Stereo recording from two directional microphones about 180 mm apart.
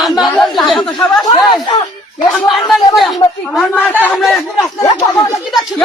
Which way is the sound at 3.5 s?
10° left (ahead or behind).